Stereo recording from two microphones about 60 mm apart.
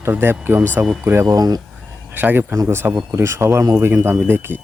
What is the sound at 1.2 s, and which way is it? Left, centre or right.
Speech, right.